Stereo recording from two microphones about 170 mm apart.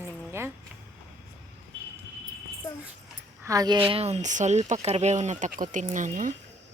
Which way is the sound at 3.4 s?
20° right (ahead or behind).